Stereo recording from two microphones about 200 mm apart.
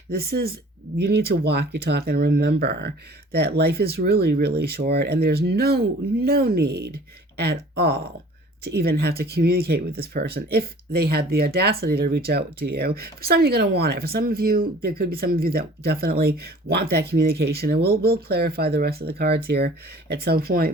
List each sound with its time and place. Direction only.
0.1 s speech: 50° right (ahead or behind)